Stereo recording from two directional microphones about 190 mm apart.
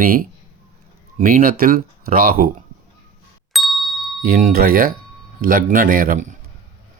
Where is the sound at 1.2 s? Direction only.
45° right (ahead or behind).